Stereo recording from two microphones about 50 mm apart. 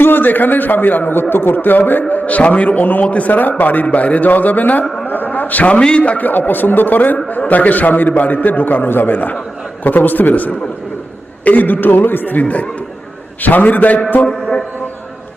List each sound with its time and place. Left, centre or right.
0.0 s a man's voice: left
5.0 s a sound: left
5.8 s a man's voice: left
14.3 s speech: left